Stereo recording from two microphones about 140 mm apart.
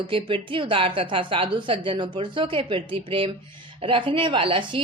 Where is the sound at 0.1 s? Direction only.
40° right (ahead or behind).